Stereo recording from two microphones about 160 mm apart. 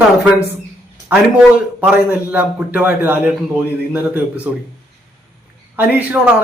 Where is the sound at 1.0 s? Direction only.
10° right (ahead or behind).